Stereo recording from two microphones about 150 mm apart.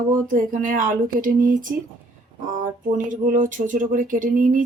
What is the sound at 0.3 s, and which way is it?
Speech, 60° right (ahead or behind).